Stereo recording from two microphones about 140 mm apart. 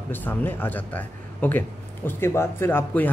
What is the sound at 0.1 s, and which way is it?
Speech, 15° left (ahead or behind).